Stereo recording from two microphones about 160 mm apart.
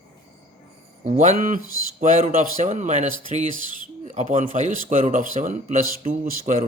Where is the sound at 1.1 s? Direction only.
45° right (ahead or behind).